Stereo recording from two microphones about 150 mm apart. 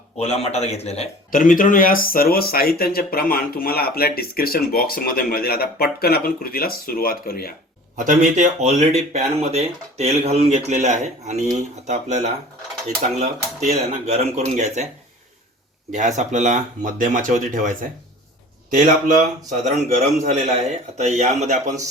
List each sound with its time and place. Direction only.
0.2 s speech: 45° left (ahead or behind)
1.3 s speech: 65° left (ahead or behind); by 7.5 s 80° left
7.9 s speech: 55° right (ahead or behind)
15.9 s speech: 50° right (ahead or behind)